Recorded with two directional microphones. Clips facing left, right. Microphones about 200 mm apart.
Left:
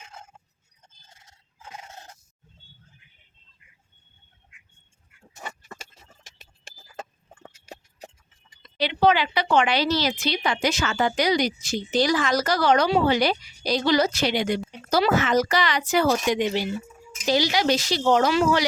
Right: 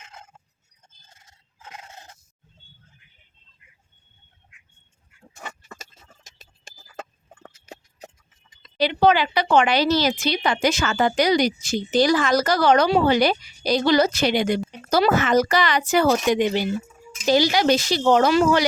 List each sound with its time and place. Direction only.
8.8 s speech: 45° right (ahead or behind)